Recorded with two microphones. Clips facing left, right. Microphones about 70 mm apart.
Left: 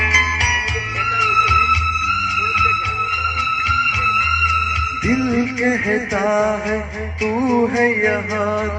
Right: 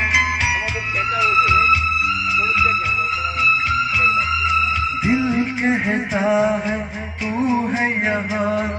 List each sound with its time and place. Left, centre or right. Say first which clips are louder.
2.0 s music: left 2 dB; left
3.5 s music: left 2 dB; left
5.6 s music: left 2 dB; centre
7.8 s music: left 4 dB; left